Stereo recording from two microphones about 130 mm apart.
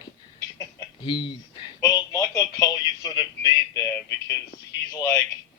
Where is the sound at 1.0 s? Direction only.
40° left (ahead or behind).